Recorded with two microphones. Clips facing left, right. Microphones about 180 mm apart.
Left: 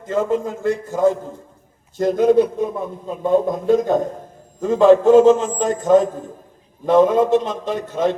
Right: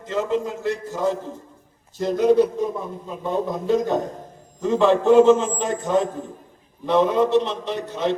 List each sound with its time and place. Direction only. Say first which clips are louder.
0.1 s a man's voice: left 3 dB; 50° left (ahead or behind)